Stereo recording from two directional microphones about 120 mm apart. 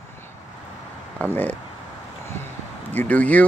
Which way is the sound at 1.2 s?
15° left (ahead or behind).